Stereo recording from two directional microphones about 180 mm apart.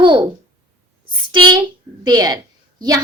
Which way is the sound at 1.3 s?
25° right (ahead or behind).